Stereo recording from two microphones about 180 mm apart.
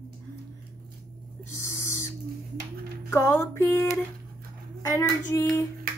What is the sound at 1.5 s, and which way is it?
Owl, 15° left (ahead or behind).